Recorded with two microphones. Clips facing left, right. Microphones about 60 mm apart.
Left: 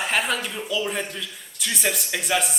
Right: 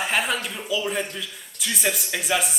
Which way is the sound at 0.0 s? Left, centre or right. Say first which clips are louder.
Even; centre.